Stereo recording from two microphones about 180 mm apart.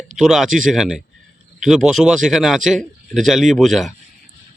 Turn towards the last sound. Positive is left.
turn(degrees=0)  # may be behind; listen again after turning